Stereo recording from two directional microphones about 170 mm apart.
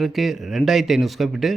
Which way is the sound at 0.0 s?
Centre (ahead or behind).